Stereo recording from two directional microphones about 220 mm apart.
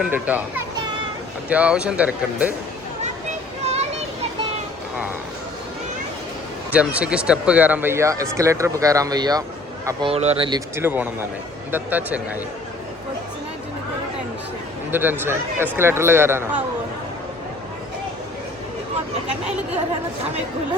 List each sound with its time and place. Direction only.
0.0 s speech: 5° right (ahead or behind)
6.7 s speech: 5° right (ahead or behind); by 10.6 s 25° right (ahead or behind)
10.8 s speech: 10° right (ahead or behind)
14.8 s speech: 10° right (ahead or behind)